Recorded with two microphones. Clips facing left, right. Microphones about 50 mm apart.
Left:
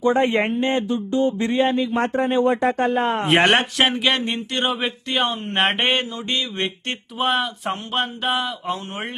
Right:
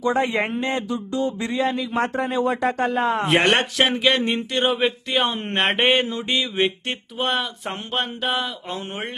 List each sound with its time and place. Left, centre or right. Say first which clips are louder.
0.0 s a sound: left 3 dB; left
2.4 s speech: left 1 dB; left
3.2 s speech: left 3 dB; centre